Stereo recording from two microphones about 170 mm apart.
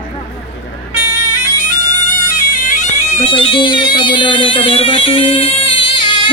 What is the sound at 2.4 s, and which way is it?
Bagpipes, 50° left (ahead or behind).